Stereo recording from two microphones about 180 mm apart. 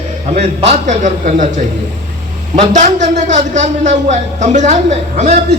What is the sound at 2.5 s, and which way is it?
A man's voice, 40° right (ahead or behind).